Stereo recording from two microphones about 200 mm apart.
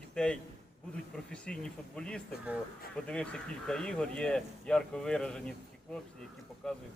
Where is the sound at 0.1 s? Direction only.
5° left (ahead or behind).